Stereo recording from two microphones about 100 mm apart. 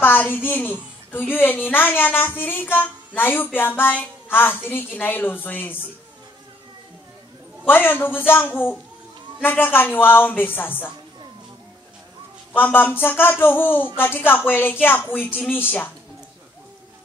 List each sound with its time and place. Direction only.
0.0 s a child's voice: 20° left (ahead or behind)
7.6 s a child's voice: 20° left (ahead or behind)
12.5 s a child's voice: 20° left (ahead or behind)